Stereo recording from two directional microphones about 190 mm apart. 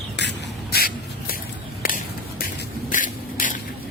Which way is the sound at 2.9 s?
45° left (ahead or behind).